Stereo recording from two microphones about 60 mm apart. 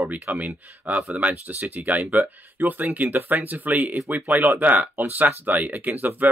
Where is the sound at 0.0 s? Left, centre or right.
Right.